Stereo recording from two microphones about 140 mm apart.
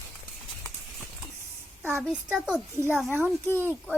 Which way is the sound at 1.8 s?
15° right (ahead or behind).